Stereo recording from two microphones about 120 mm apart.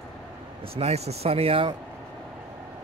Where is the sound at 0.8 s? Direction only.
60° right (ahead or behind).